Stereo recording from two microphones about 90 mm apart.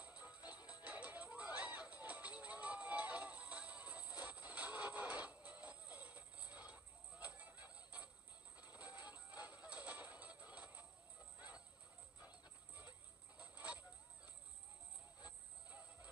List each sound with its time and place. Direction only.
0.0 s music: 15° right (ahead or behind)
11.3 s clip-clop: 15° right (ahead or behind)
12.2 s music: 15° right (ahead or behind)
13.4 s a sound: 15° right (ahead or behind)